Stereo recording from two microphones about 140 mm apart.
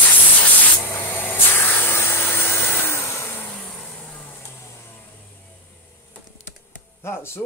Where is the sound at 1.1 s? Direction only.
15° left (ahead or behind).